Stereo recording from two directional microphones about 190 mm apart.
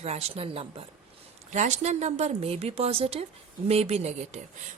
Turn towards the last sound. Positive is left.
turn(degrees=-35)  # may be behind; listen again after turning